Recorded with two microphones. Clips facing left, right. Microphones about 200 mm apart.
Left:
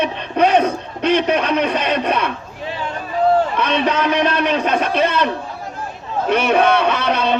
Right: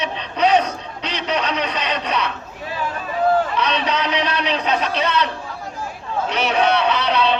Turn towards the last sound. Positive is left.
turn(degrees=50)  # may be behind; listen again after turning